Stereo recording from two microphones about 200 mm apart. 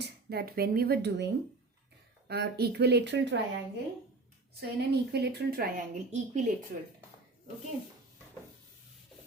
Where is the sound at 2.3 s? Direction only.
55° right (ahead or behind).